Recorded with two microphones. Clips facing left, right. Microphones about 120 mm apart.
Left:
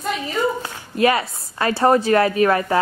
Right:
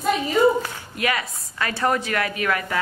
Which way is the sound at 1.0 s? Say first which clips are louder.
Left 8 dB; 30° left (ahead or behind).